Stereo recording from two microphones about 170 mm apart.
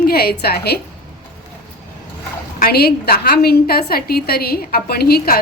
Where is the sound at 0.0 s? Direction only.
65° left (ahead or behind).